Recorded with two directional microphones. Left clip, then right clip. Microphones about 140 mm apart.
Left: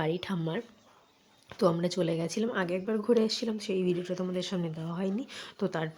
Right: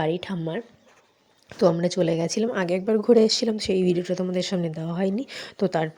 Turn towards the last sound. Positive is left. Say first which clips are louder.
# right 8 dB
turn(degrees=-35)  # may be behind; listen again after turning